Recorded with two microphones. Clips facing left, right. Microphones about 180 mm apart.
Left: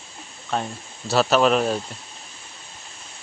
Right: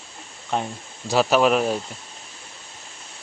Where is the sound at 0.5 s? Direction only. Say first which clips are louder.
Right 1 dB; 15° right (ahead or behind).